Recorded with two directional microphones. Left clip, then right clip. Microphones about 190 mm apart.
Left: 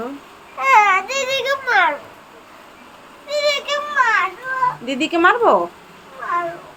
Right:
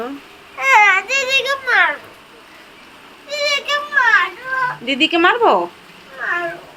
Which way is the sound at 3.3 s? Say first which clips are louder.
Right 1 dB; 10° right (ahead or behind).